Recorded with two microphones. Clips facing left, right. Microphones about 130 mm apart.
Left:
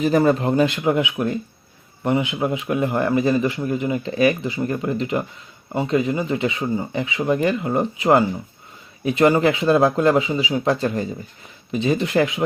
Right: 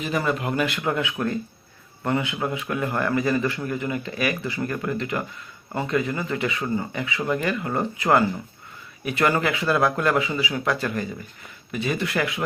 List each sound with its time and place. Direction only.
0.0 s a man's voice: 35° left (ahead or behind); by 12.4 s 20° left (ahead or behind)